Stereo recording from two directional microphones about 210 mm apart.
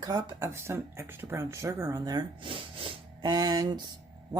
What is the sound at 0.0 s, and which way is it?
Speech, 20° right (ahead or behind).